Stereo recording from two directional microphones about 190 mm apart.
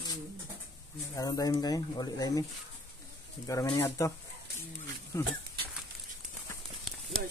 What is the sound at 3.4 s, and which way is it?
Speech, 20° left (ahead or behind).